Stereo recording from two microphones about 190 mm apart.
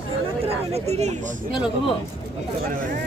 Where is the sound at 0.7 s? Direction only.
35° right (ahead or behind).